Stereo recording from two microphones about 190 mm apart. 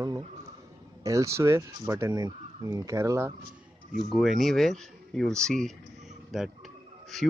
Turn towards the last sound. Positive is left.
turn(degrees=0)  # may be behind; listen again after turning